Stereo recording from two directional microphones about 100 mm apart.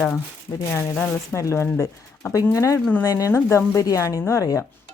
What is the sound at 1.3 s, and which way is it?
A woman's voice, 30° left (ahead or behind).